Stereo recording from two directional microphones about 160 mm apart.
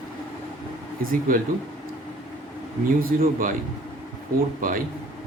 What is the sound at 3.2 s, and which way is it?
Speech, 55° right (ahead or behind).